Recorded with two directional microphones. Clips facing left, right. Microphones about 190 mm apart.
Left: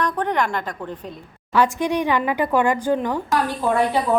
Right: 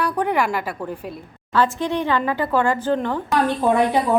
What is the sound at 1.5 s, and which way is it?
Speech, 15° left (ahead or behind).